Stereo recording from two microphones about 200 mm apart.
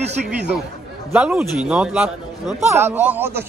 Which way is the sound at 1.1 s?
5° right (ahead or behind).